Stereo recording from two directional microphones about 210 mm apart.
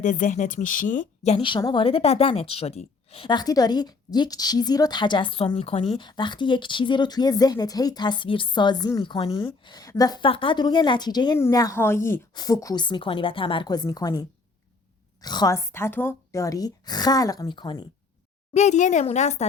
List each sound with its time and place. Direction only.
0.0 s speech: 35° left (ahead or behind); by 17.8 s 20° left (ahead or behind)
18.5 s a woman's voice: 35° left (ahead or behind)